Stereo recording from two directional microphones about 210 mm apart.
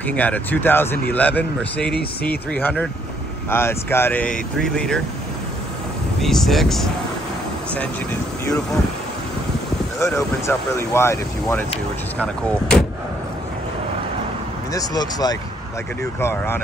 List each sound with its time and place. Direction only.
0.0 s speech: 5° left (ahead or behind)
6.2 s speech: centre (ahead or behind)
10.1 s speech: 15° left (ahead or behind)
14.7 s speech: 15° left (ahead or behind)